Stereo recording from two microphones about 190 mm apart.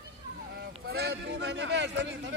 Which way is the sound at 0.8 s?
55° right (ahead or behind).